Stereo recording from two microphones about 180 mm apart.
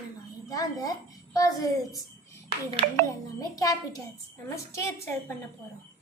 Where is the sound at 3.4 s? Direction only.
20° left (ahead or behind).